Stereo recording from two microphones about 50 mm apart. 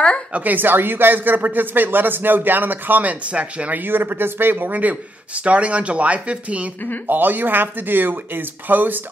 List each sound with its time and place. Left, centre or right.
0.3 s speech: right
3.8 s speech: right